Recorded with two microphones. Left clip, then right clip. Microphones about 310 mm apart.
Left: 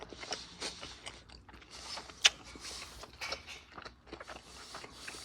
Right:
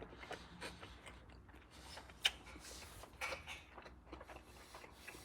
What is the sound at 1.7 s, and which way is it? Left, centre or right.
Shuffling cards, centre.